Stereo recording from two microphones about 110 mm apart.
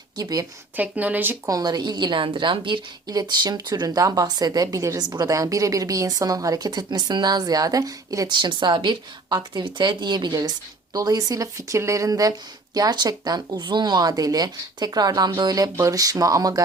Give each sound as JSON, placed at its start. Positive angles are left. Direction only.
{"t": 0.2, "sound": "a woman's voice", "side_deg": -35}
{"t": 0.8, "sound": "speech", "side_deg": -15}
{"t": 1.5, "sound": "a woman's voice", "side_deg": -35}